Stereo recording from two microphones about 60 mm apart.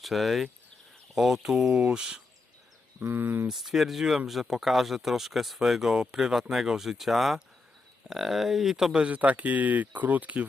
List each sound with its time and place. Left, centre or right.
0.0 s speech: centre
3.0 s speech: right
3.5 s speech: centre
9.1 s speech: right